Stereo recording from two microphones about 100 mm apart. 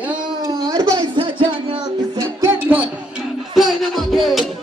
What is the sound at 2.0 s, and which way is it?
Music, 35° right (ahead or behind).